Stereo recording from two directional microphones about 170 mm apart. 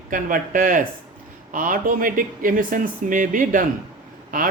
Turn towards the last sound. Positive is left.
turn(degrees=-55)  # may be behind; listen again after turning